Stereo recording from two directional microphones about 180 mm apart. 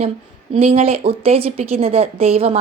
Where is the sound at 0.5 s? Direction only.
30° right (ahead or behind).